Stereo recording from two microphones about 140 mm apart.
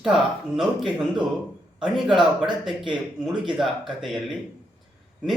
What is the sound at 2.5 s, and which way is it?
Speech, 35° right (ahead or behind).